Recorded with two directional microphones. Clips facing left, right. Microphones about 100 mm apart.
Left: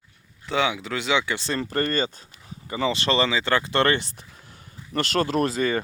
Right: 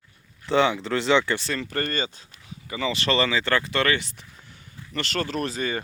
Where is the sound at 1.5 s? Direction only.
35° left (ahead or behind).